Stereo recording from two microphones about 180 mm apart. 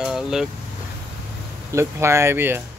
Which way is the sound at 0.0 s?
5° right (ahead or behind).